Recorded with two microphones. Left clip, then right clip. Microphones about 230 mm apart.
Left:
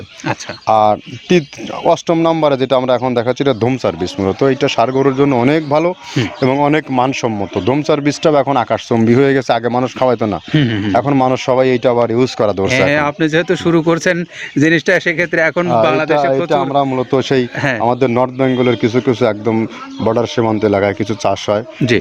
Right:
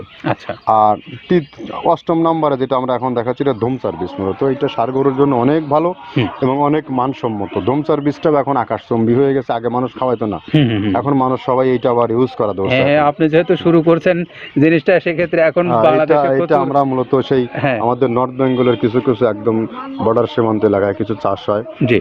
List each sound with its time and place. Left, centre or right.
0.7 s speech: left
10.5 s a man's voice: left
10.9 s speech: left
12.7 s a man's voice: left
17.6 s a man's voice: left
17.8 s a man's voice: left